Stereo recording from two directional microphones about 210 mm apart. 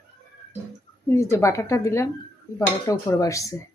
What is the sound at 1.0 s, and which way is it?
Speech, 10° left (ahead or behind).